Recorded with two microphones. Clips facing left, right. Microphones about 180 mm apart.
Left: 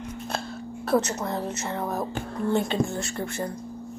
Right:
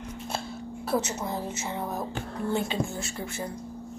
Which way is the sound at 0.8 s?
65° left (ahead or behind).